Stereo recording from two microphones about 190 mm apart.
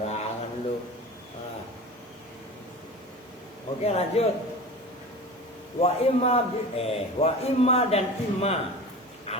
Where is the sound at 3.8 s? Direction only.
35° left (ahead or behind).